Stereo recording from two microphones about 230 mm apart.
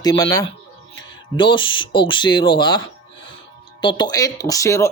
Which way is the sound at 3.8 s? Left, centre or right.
Centre.